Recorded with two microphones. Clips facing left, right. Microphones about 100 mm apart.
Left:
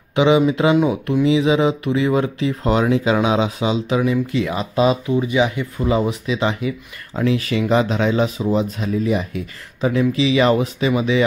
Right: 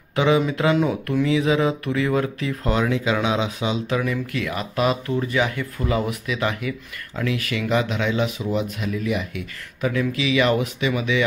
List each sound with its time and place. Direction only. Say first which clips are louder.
0.1 s speech: left 5 dB; 20° left (ahead or behind)